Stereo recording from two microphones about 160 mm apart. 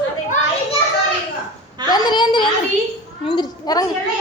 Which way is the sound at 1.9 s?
30° left (ahead or behind).